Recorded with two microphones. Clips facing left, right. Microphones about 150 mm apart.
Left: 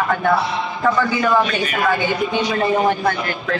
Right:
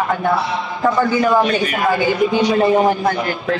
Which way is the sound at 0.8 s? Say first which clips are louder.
Right 3 dB; 25° right (ahead or behind).